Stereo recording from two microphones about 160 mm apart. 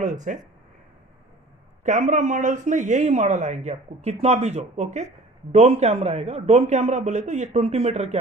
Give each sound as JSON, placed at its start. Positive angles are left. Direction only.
{"t": 0.0, "sound": "speech", "side_deg": -50}
{"t": 1.8, "sound": "speech", "side_deg": -50}